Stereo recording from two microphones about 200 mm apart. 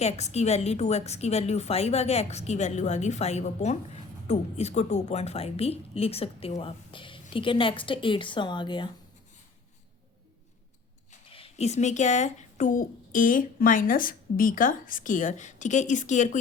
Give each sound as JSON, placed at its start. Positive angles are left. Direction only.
{"t": 0.0, "sound": "a woman's voice", "side_deg": 35}
{"t": 11.1, "sound": "a woman's voice", "side_deg": 30}